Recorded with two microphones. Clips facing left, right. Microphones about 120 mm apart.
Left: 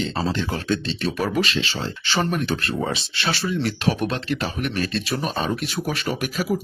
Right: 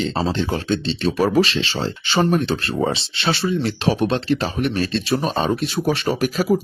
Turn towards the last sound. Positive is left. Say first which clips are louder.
# right 5 dB
turn(degrees=-40)  # may be behind; listen again after turning